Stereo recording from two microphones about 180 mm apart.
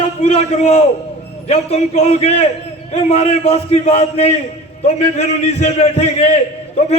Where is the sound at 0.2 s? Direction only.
40° left (ahead or behind).